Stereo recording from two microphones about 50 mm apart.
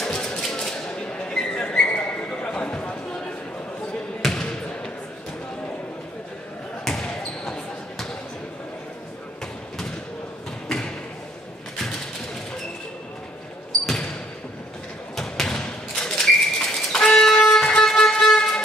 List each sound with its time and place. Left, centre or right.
0.0 s a sound: centre
4.2 s basketball bounce: centre
6.8 s basketball bounce: centre
13.7 s basketball bounce: centre
15.1 s thump: centre
15.5 s a sound: centre